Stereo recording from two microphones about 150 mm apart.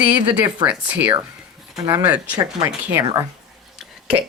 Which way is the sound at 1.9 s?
25° right (ahead or behind).